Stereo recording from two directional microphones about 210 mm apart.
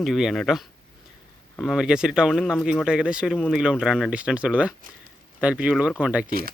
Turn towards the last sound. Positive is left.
turn(degrees=-45)  # may be behind; listen again after turning